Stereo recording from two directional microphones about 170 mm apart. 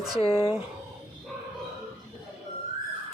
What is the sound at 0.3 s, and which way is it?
Speech, 35° left (ahead or behind).